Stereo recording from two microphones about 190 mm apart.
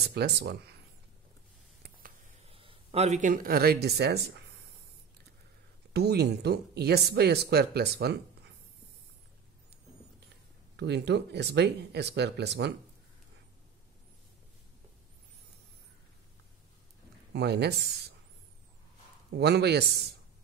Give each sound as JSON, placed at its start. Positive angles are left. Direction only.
{"t": 0.1, "sound": "speech", "side_deg": -55}
{"t": 2.4, "sound": "speech", "side_deg": -30}
{"t": 5.9, "sound": "speech", "side_deg": -60}
{"t": 10.8, "sound": "speech", "side_deg": -60}
{"t": 17.3, "sound": "speech", "side_deg": -60}
{"t": 19.3, "sound": "speech", "side_deg": -60}